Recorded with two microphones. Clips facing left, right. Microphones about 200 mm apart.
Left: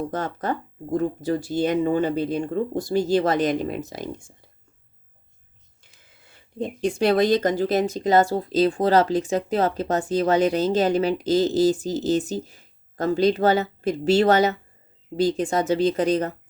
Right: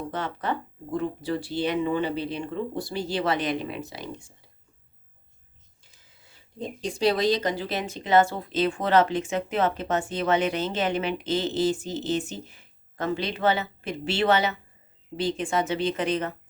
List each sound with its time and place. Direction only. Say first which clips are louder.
0.1 s speech: left 3 dB; 45° left (ahead or behind)
5.8 s speech: left 4 dB; 60° left (ahead or behind); by 16.3 s 40° left (ahead or behind)